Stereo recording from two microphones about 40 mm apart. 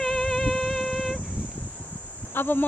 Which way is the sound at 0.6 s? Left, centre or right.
Centre.